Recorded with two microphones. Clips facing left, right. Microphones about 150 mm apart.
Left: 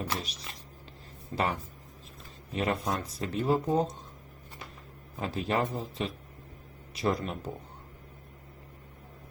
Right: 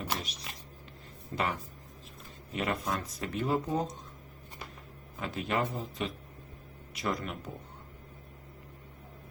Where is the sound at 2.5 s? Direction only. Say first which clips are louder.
Left 3 dB; 30° left (ahead or behind).